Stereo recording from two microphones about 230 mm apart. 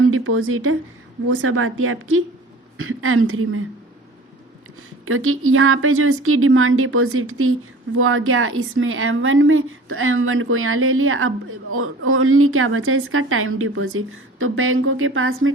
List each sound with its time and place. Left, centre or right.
0.1 s a woman's voice: right
5.0 s a woman's voice: right